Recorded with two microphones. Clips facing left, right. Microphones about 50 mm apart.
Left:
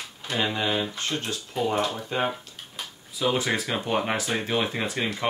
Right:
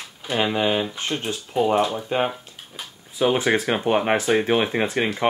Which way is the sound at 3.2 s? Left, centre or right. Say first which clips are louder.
Right 5 dB; right.